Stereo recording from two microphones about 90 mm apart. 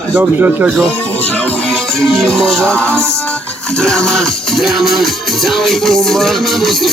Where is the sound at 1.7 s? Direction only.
10° left (ahead or behind).